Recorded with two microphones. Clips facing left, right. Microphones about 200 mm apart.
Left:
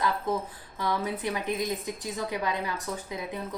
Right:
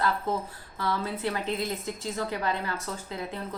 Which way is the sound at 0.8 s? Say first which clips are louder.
Even; 15° left (ahead or behind).